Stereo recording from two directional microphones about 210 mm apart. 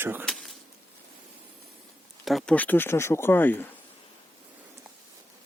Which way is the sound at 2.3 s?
Centre (ahead or behind).